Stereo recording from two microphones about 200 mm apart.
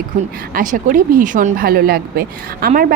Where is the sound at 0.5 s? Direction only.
40° right (ahead or behind).